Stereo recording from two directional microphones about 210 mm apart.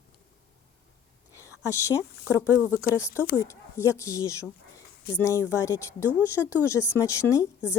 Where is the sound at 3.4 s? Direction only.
15° left (ahead or behind).